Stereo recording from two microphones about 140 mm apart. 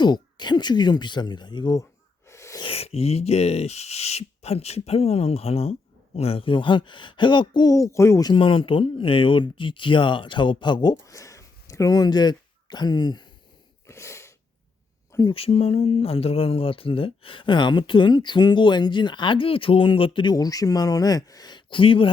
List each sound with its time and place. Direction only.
0.0 s speech: 30° left (ahead or behind)
2.3 s a sound: 20° left (ahead or behind)
2.6 s speech: 45° left (ahead or behind); by 8.3 s 20° left (ahead or behind)
8.3 s speech: 40° left (ahead or behind)
10.9 s speech: 20° left (ahead or behind)
13.8 s sneeze: 20° left (ahead or behind)
15.3 s speech: 40° left (ahead or behind)
20.3 s speech: 25° left (ahead or behind)